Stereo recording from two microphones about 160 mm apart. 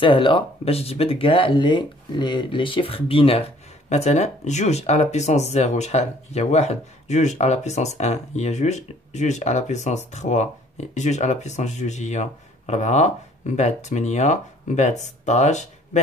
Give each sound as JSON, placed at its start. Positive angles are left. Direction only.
{"t": 0.0, "sound": "speech", "side_deg": 30}